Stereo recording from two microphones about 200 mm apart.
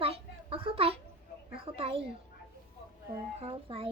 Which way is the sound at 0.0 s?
30° right (ahead or behind).